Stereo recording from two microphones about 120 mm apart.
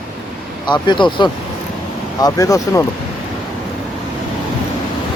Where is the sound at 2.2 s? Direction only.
30° left (ahead or behind).